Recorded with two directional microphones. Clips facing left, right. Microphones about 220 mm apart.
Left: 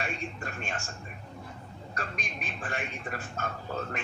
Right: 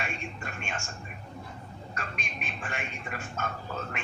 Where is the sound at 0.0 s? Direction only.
35° left (ahead or behind).